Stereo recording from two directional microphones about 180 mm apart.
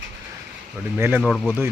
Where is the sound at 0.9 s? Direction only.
15° right (ahead or behind).